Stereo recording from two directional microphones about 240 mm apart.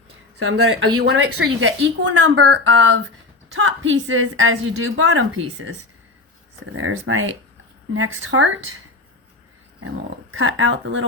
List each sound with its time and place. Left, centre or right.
0.3 s a woman's voice: right
6.7 s a woman's voice: right
10.3 s speech: right